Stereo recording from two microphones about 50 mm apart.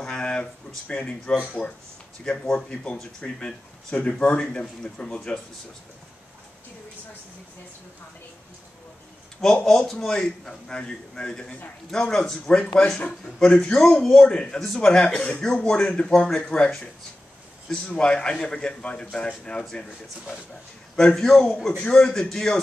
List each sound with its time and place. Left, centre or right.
0.0 s a sound: centre
0.9 s a man's voice: centre
9.4 s a man's voice: centre
21.1 s a man's voice: centre